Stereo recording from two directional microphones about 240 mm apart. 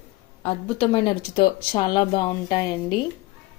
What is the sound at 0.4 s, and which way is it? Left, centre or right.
A woman's voice, left.